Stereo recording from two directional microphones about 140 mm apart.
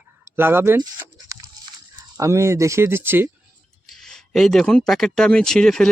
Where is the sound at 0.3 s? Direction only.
15° right (ahead or behind).